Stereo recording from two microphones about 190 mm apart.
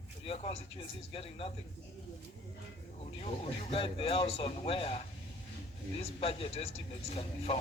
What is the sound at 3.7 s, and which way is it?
Speech, 30° left (ahead or behind).